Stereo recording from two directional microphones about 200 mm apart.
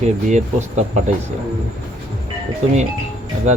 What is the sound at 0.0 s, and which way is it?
Speech, 35° right (ahead or behind).